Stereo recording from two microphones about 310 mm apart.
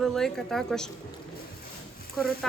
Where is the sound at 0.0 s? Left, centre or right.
Centre.